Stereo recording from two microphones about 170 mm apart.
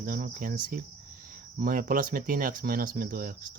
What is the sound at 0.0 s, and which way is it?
Cricket, 60° right (ahead or behind).